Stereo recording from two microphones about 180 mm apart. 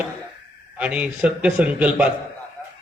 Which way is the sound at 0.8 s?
5° right (ahead or behind).